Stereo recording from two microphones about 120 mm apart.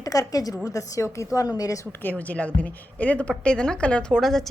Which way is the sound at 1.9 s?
15° left (ahead or behind).